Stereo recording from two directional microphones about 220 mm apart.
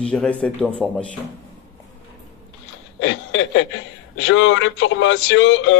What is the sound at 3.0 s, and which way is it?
Speech, 55° left (ahead or behind).